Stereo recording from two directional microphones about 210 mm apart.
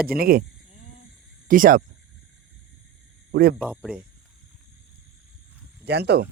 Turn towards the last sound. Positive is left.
turn(degrees=-50)  # may be behind; listen again after turning